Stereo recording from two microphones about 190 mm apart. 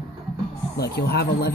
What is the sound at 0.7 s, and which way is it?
Speech, 60° left (ahead or behind).